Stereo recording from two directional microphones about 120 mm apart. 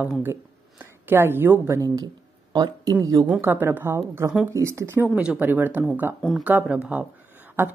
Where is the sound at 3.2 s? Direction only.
15° right (ahead or behind).